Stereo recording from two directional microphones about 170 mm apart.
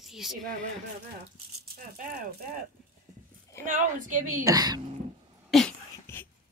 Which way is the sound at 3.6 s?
50° right (ahead or behind).